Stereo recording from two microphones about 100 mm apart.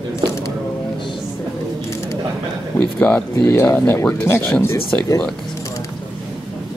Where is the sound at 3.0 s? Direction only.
10° left (ahead or behind).